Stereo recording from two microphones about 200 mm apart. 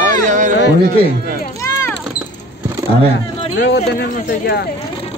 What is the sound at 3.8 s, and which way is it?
Speech, 45° left (ahead or behind).